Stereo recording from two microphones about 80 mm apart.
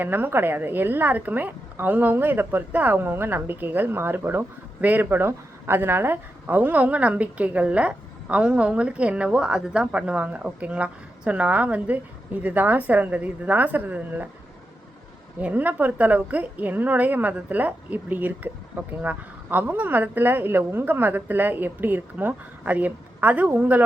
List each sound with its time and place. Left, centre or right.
0.0 s a woman's voice: right
15.4 s a woman's voice: right